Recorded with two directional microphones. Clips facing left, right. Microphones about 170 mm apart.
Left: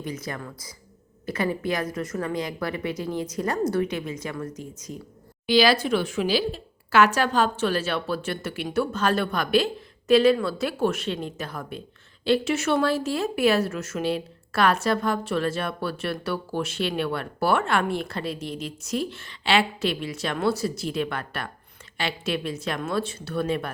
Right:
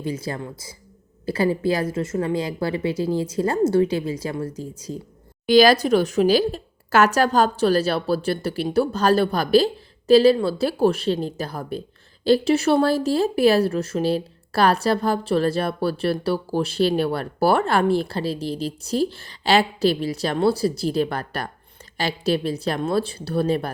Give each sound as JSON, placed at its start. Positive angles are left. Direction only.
{"t": 0.0, "sound": "a woman's voice", "side_deg": -30}
{"t": 5.5, "sound": "speech", "side_deg": -45}